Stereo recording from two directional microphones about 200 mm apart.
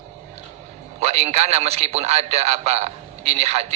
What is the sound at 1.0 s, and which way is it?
A man's voice, 30° right (ahead or behind).